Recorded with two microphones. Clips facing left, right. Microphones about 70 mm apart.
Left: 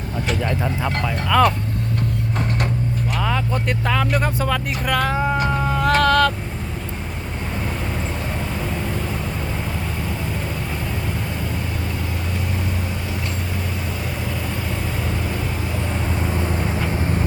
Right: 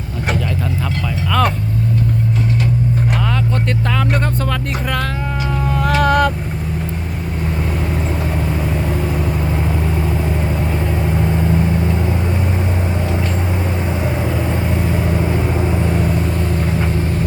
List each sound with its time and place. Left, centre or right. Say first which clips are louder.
1.0 s speech: left 1 dB; centre
3.2 s speech: right 3 dB; centre
5.8 s vehicle: right 1 dB; centre
11.1 s vehicle: right 9 dB; right
14.5 s vehicle: right 7 dB; right
16.2 s vehicle: right 3 dB; centre